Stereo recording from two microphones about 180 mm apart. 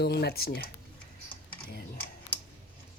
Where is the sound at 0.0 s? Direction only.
65° left (ahead or behind).